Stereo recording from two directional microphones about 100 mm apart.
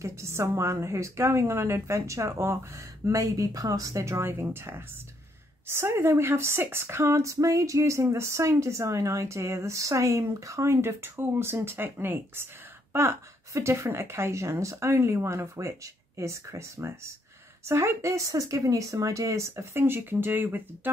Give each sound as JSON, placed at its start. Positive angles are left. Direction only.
{"t": 0.0, "sound": "speech", "side_deg": -25}